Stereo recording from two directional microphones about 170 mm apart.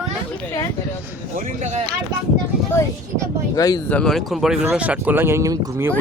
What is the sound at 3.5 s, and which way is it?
Speech, 20° left (ahead or behind).